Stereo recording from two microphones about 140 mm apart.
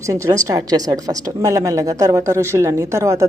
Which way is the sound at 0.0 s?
20° right (ahead or behind).